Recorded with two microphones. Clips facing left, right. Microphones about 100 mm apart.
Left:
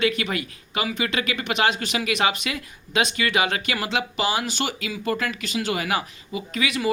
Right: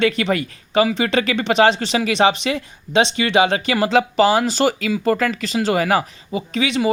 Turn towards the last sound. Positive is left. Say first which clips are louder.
# right 5 dB
turn(degrees=-25)  # may be behind; listen again after turning